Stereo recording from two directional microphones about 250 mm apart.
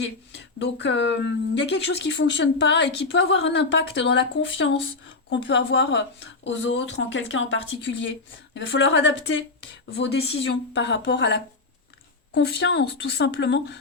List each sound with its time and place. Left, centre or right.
0.0 s speech: left